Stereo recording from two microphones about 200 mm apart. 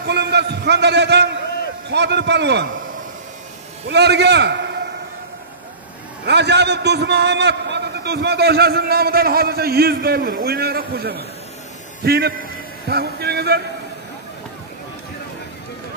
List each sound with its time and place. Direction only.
0.1 s a sound: 55° right (ahead or behind)
1.9 s a man's voice: 60° right (ahead or behind)
3.9 s a man's voice: 55° right (ahead or behind)
6.2 s a man's voice: 60° right (ahead or behind)